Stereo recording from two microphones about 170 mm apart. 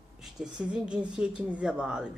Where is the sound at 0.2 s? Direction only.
5° right (ahead or behind).